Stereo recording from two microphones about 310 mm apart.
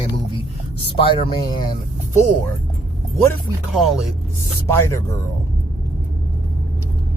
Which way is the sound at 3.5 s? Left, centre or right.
Centre.